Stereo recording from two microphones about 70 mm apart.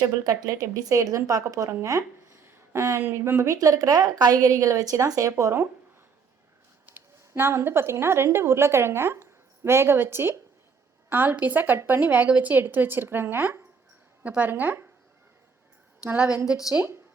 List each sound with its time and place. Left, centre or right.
0.3 s speech: right
6.9 s a sound: right
7.3 s a woman's voice: right
16.1 s a woman's voice: centre